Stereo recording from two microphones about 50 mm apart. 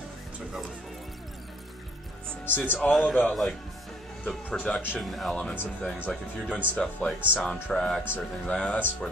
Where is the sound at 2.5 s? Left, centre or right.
Left.